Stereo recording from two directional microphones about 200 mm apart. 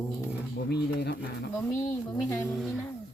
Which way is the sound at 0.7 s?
55° left (ahead or behind).